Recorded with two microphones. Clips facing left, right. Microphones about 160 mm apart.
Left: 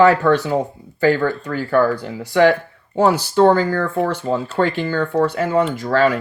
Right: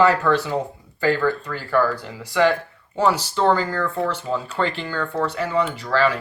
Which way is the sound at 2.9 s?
45° left (ahead or behind).